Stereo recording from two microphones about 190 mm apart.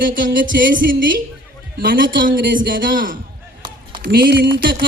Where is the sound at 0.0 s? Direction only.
45° right (ahead or behind).